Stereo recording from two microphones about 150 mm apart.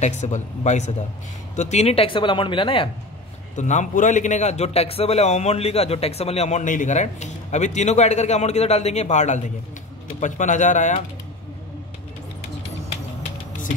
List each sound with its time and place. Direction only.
0.0 s a man's voice: 50° left (ahead or behind); by 2.9 s 35° left (ahead or behind)
3.5 s a man's voice: 55° left (ahead or behind)